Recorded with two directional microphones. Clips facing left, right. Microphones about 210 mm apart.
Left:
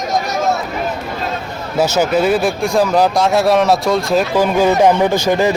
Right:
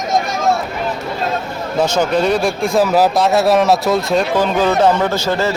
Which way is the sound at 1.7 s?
5° left (ahead or behind).